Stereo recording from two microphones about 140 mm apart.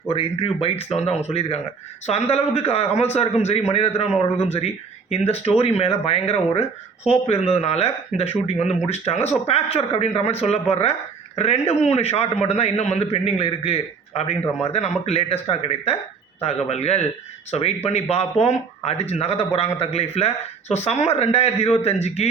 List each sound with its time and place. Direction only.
0.1 s a man's voice: 40° left (ahead or behind)